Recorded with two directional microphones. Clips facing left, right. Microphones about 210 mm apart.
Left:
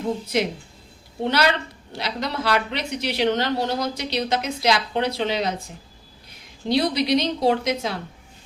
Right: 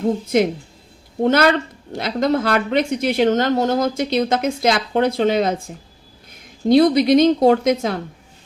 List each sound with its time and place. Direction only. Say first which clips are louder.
0.3 s speech: right 6 dB; 50° right (ahead or behind)